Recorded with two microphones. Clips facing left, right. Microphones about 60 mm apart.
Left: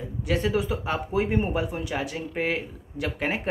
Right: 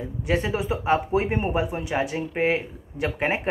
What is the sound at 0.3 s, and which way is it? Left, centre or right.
Speech, right.